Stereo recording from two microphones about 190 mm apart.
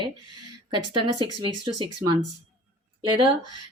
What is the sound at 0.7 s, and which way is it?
Speech, 25° right (ahead or behind).